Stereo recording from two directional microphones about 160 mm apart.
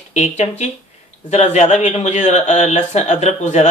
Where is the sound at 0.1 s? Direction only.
45° left (ahead or behind).